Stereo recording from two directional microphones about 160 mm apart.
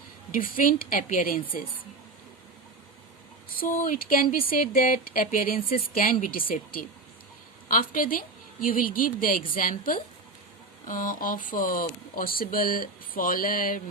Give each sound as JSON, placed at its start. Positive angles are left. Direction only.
{"t": 0.3, "sound": "speech", "side_deg": 60}
{"t": 3.6, "sound": "speech", "side_deg": 60}